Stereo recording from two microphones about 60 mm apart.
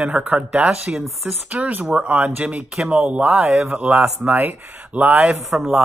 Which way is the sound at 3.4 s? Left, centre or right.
Centre.